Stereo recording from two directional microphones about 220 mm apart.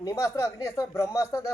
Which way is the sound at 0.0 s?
15° left (ahead or behind).